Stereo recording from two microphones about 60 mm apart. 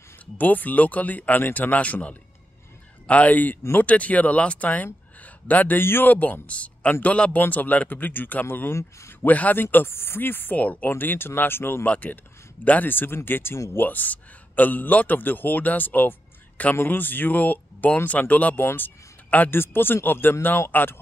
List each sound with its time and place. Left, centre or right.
0.4 s a man's voice: left
11.8 s a man's voice: left
18.6 s speech: left